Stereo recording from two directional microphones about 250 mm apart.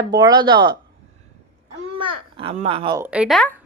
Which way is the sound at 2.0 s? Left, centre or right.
Right.